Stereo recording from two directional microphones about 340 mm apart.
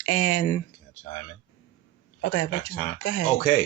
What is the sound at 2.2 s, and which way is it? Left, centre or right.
Speech, left.